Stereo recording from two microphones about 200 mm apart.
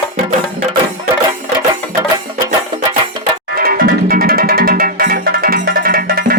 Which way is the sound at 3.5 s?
45° right (ahead or behind).